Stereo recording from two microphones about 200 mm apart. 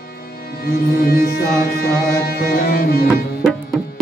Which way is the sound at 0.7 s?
50° left (ahead or behind).